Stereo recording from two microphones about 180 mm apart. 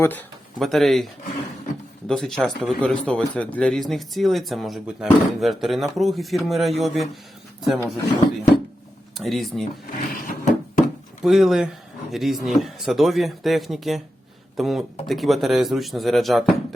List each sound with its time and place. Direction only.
0.0 s speech: 10° left (ahead or behind)
9.1 s speech: centre (ahead or behind)
9.9 s wood: 50° left (ahead or behind)
11.2 s speech: centre (ahead or behind)